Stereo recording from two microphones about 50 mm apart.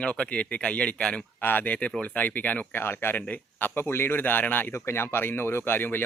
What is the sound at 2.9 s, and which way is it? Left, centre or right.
Speech, left.